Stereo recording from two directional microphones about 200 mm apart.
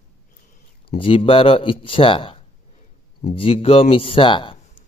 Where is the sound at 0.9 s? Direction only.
25° left (ahead or behind).